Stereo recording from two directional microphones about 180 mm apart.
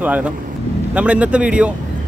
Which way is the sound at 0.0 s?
10° right (ahead or behind).